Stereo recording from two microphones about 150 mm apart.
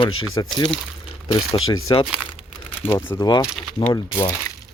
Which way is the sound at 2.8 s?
15° left (ahead or behind).